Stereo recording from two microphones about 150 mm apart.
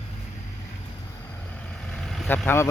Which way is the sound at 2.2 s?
10° left (ahead or behind).